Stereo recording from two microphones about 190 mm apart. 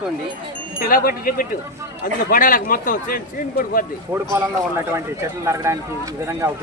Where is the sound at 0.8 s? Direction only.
50° left (ahead or behind).